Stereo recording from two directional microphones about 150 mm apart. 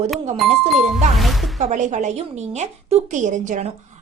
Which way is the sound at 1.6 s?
50° right (ahead or behind).